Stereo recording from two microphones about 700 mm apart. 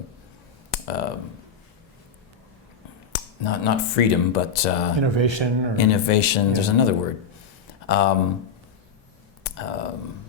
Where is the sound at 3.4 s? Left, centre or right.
Left.